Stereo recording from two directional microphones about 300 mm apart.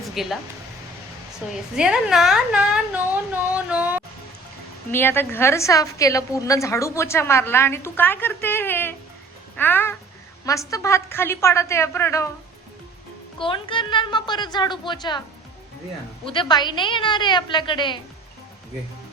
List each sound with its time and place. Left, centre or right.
0.1 s speech: centre
1.7 s a woman's voice: centre
3.5 s a sound: centre
4.9 s a woman's voice: centre
13.4 s a woman's voice: centre
16.2 s a woman's voice: centre